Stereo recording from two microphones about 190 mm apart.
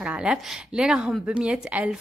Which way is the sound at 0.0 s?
5° right (ahead or behind).